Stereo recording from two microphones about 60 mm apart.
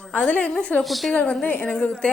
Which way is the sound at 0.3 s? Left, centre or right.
Left.